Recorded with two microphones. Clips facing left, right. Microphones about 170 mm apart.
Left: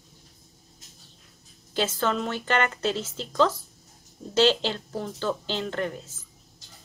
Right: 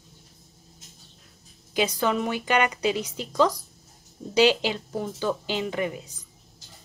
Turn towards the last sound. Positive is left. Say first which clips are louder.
# right 1 dB
turn(degrees=0)  # may be behind; listen again after turning